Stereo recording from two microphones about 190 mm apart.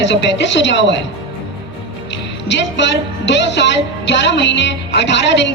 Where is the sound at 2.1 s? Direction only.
65° left (ahead or behind).